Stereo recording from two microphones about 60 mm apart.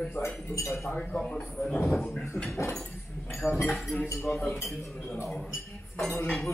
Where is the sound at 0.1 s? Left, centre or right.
Left.